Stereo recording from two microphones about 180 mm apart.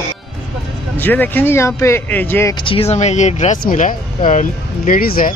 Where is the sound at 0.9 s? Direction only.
10° left (ahead or behind).